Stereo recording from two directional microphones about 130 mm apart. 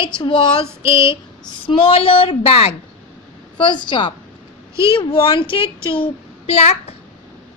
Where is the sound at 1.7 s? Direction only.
40° left (ahead or behind).